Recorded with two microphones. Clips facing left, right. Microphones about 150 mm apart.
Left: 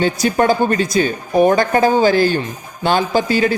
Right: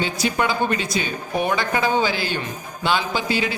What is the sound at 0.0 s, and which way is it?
A man's voice, 45° left (ahead or behind).